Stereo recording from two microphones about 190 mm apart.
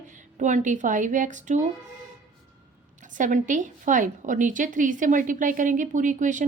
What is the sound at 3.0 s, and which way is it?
A woman's voice, 40° right (ahead or behind).